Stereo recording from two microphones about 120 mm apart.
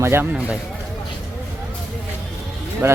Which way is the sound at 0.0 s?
20° right (ahead or behind).